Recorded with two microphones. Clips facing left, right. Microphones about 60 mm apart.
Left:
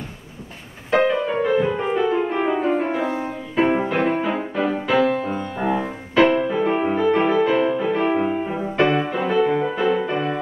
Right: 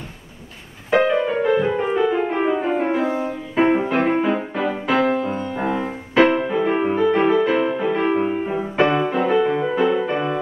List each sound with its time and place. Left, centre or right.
0.8 s music: centre
4.8 s music: centre
5.2 s music: centre